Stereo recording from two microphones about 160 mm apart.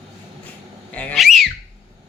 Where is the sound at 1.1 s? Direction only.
Centre (ahead or behind).